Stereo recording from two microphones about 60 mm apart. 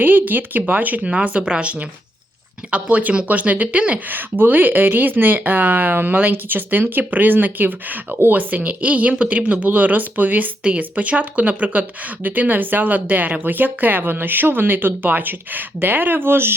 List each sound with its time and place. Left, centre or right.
0.0 s speech: right
2.9 s speech: right